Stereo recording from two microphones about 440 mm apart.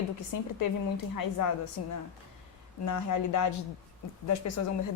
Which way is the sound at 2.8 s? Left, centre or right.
Left.